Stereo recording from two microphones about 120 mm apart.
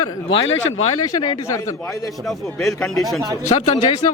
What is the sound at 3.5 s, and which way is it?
Speech, 50° left (ahead or behind).